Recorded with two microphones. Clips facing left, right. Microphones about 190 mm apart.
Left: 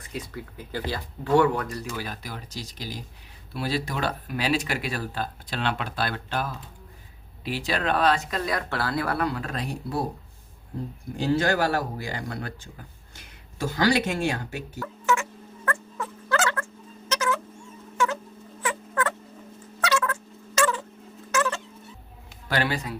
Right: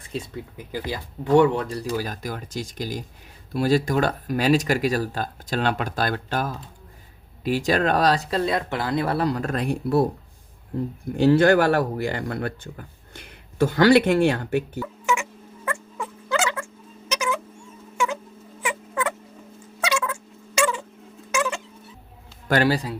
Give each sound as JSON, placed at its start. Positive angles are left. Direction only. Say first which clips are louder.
{"t": 0.1, "sound": "speech", "louder": "right 4 dB", "side_deg": -25}
{"t": 11.2, "sound": "speech", "louder": "right 7 dB", "side_deg": -60}
{"t": 14.8, "sound": "turkey", "louder": "right 1 dB", "side_deg": -10}
{"t": 17.1, "sound": "cat", "louder": "even", "side_deg": -10}
{"t": 18.6, "sound": "rodents", "louder": "right 1 dB", "side_deg": -10}
{"t": 19.8, "sound": "cat", "louder": "even", "side_deg": -10}
{"t": 21.3, "sound": "a sound", "louder": "right 1 dB", "side_deg": -10}
{"t": 22.4, "sound": "speech", "louder": "right 6 dB", "side_deg": -45}